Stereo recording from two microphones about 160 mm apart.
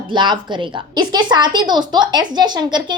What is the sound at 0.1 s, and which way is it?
Speech, 30° right (ahead or behind).